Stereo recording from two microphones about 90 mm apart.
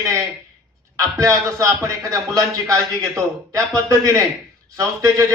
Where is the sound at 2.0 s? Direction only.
40° right (ahead or behind).